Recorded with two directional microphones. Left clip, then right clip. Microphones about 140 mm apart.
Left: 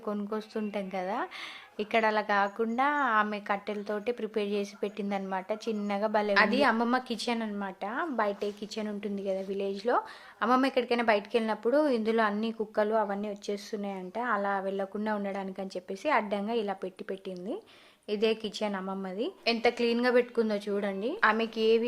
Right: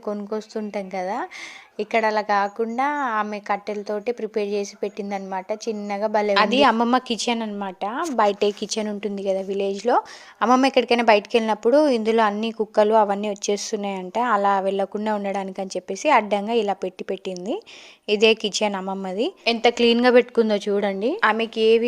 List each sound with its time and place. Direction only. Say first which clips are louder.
0.0 s speech: right 7 dB; 30° right (ahead or behind)
6.3 s a woman's voice: right 8 dB; 50° right (ahead or behind)
8.3 s a woman's voice: right 12 dB; 60° right (ahead or behind); by 21.8 s 35° right (ahead or behind)